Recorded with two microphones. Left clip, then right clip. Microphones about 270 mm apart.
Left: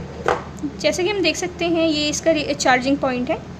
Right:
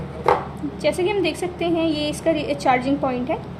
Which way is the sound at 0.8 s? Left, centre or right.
Left.